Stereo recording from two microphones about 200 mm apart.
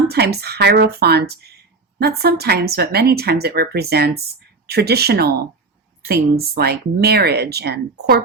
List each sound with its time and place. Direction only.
0.1 s speech: 55° right (ahead or behind)